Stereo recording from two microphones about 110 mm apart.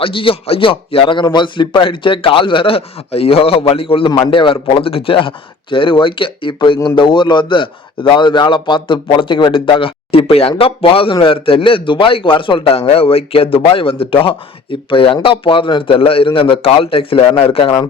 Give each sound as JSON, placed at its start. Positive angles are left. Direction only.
{"t": 0.0, "sound": "a man's voice", "side_deg": 55}